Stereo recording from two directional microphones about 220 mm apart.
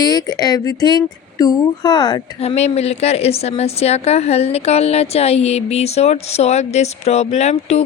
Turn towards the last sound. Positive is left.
turn(degrees=30)  # may be behind; listen again after turning